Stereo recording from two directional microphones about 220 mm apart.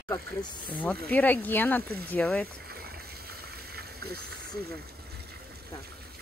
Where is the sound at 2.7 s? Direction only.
45° right (ahead or behind).